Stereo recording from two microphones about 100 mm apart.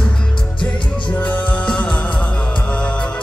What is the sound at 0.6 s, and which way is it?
Music, 15° left (ahead or behind).